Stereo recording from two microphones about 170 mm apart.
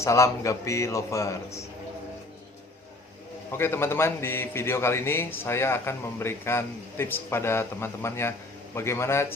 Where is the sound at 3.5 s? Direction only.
15° left (ahead or behind).